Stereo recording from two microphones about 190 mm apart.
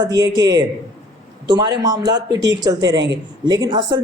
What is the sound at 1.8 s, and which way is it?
A man's voice, 20° right (ahead or behind).